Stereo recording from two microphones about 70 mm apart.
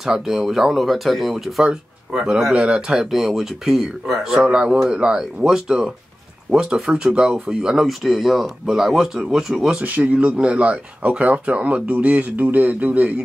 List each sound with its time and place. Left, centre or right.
0.0 s speech: centre
9.8 s speech: right